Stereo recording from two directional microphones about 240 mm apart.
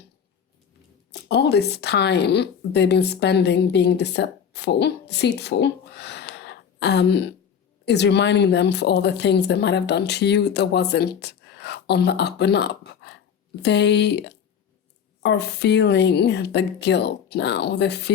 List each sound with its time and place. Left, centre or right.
1.3 s a woman's voice: left